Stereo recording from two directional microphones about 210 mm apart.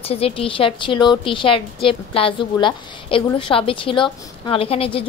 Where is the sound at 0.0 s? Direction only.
30° left (ahead or behind).